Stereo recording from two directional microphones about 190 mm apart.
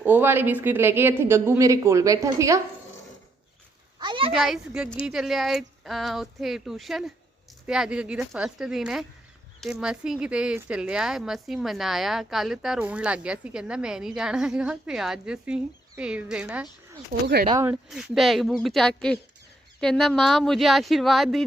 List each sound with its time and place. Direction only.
0.0 s speech: 10° right (ahead or behind)
4.0 s speech: 25° right (ahead or behind)
4.3 s speech: centre (ahead or behind)
17.1 s speech: 60° right (ahead or behind)
17.4 s speech: 25° right (ahead or behind)
17.7 s speech: centre (ahead or behind)